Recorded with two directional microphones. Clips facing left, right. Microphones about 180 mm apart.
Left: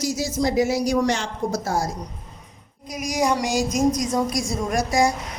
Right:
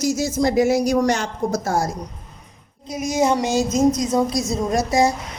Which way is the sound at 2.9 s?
25° right (ahead or behind).